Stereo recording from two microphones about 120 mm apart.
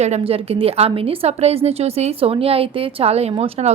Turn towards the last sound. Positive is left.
turn(degrees=-55)  # may be behind; listen again after turning